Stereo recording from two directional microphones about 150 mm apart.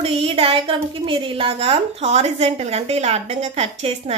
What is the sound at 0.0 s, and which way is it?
A woman's voice, 40° right (ahead or behind).